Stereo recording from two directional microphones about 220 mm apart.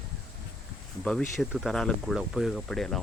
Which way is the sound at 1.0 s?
Centre (ahead or behind).